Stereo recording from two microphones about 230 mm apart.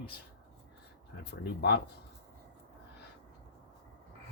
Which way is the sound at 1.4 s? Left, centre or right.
Left.